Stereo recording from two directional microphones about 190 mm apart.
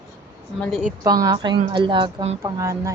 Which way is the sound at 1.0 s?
20° right (ahead or behind).